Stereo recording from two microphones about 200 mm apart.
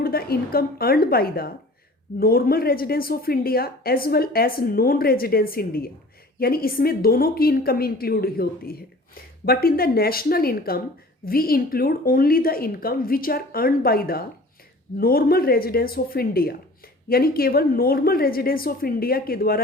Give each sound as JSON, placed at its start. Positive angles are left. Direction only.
{"t": 0.0, "sound": "speech", "side_deg": 50}